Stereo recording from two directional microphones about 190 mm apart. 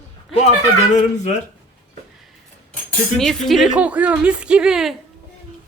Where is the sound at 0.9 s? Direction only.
35° left (ahead or behind).